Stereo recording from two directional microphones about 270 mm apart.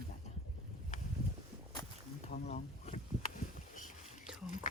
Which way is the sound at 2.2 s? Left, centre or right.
Left.